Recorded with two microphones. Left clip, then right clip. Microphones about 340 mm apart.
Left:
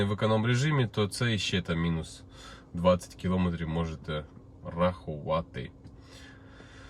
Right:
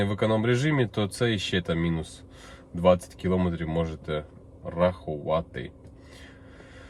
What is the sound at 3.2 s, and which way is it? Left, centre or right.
Speech, left.